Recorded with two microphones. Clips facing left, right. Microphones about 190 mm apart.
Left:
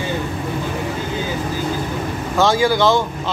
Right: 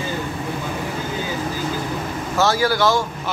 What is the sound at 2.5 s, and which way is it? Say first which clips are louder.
Speech: left 4 dB; 20° left (ahead or behind).